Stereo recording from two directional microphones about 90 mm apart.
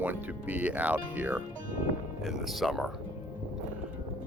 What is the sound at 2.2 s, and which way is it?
Speech, centre (ahead or behind).